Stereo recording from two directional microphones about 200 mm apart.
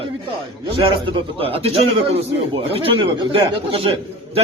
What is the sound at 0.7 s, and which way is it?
A man's voice, 25° right (ahead or behind).